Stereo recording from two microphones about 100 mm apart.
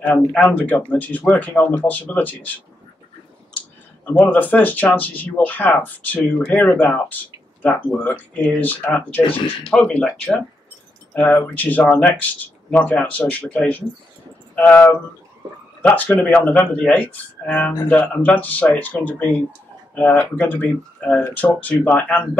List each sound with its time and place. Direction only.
0.0 s speech: 10° left (ahead or behind)
4.3 s speech: 15° left (ahead or behind)